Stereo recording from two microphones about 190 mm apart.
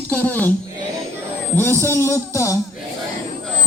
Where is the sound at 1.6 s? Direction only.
10° left (ahead or behind).